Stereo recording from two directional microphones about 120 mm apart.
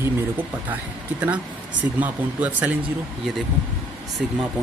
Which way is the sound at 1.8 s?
15° right (ahead or behind).